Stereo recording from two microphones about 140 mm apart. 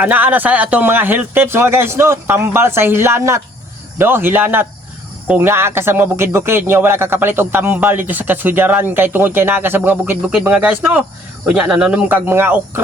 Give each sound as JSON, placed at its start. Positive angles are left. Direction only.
{"t": 0.0, "sound": "speech", "side_deg": -10}